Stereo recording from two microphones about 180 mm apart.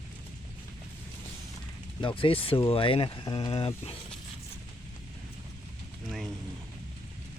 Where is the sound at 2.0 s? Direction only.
30° left (ahead or behind).